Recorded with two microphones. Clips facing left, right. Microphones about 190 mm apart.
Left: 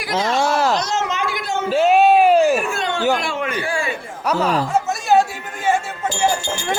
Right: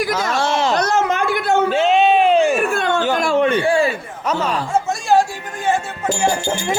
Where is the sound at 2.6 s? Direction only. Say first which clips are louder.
Right 4 dB; 55° right (ahead or behind).